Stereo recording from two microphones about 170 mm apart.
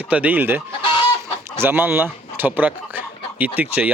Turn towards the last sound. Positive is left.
turn(degrees=-10)  # may be behind; listen again after turning